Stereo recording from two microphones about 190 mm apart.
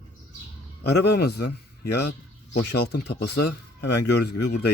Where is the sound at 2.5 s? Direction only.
60° left (ahead or behind).